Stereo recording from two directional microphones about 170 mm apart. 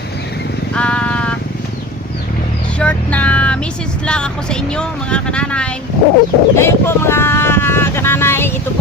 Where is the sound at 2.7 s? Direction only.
10° left (ahead or behind).